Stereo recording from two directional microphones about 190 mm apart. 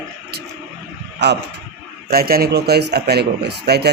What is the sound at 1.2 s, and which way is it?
Speech, 65° right (ahead or behind).